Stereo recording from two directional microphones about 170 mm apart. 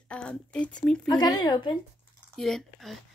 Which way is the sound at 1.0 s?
25° left (ahead or behind).